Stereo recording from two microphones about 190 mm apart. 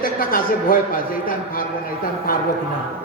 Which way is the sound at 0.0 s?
45° left (ahead or behind).